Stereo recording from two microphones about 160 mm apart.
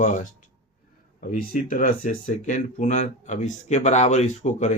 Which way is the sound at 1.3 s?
60° left (ahead or behind).